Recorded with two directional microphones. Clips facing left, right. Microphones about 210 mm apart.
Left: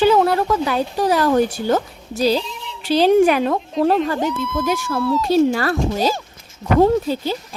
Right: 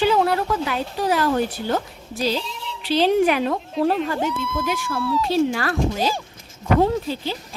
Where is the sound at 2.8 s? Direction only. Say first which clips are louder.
Left 4 dB; 45° left (ahead or behind).